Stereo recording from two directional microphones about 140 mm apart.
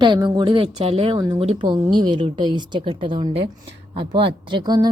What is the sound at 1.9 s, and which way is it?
A woman's voice, 35° right (ahead or behind).